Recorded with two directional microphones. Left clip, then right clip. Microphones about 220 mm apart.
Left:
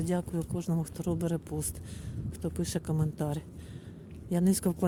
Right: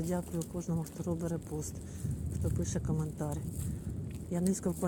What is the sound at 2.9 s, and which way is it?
Speech, 35° left (ahead or behind).